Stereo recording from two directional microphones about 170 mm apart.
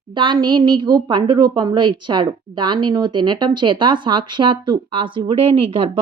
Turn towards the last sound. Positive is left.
turn(degrees=-30)  # may be behind; listen again after turning